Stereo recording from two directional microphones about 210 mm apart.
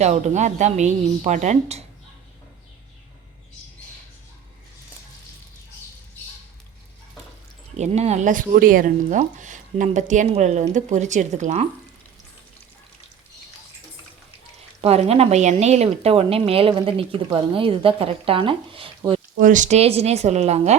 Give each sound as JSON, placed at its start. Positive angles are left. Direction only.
{"t": 0.0, "sound": "speech", "side_deg": -35}
{"t": 7.8, "sound": "speech", "side_deg": -30}
{"t": 14.8, "sound": "speech", "side_deg": -30}
{"t": 19.4, "sound": "speech", "side_deg": -40}